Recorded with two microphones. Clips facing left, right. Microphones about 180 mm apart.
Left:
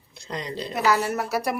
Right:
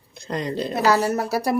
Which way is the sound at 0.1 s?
50° right (ahead or behind).